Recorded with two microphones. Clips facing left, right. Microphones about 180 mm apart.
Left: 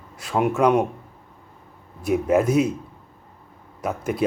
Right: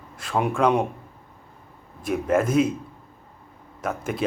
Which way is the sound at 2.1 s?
5° left (ahead or behind).